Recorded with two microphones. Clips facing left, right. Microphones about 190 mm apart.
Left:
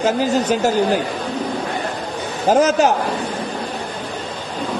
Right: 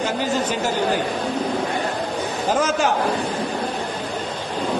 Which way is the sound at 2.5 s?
40° left (ahead or behind).